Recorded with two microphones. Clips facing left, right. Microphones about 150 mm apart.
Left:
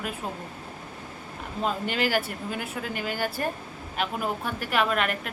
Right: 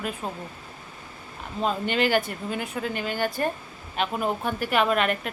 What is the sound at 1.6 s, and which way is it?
Speech, 5° left (ahead or behind).